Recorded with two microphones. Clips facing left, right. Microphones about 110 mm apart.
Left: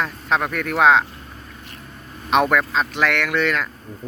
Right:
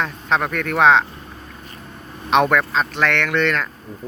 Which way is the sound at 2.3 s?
5° left (ahead or behind).